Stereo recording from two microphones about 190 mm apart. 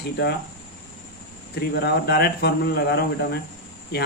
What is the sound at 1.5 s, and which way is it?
Speech, 60° left (ahead or behind).